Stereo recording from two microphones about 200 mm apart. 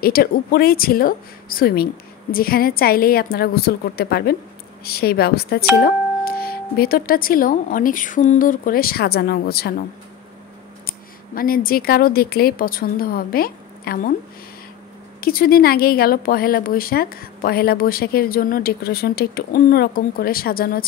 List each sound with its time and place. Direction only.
0.0 s speech: 50° left (ahead or behind)
10.9 s a woman's voice: 45° left (ahead or behind)
15.1 s speech: 45° left (ahead or behind)